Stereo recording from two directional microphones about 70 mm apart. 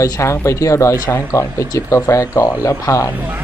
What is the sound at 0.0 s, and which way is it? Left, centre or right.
A man's voice, left.